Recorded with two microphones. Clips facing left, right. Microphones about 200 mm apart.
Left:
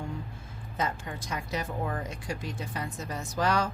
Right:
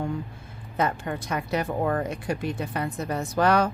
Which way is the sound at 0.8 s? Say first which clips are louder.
Right 6 dB; 60° right (ahead or behind).